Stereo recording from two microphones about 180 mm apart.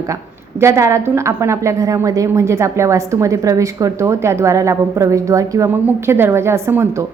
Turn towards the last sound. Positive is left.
turn(degrees=-15)  # may be behind; listen again after turning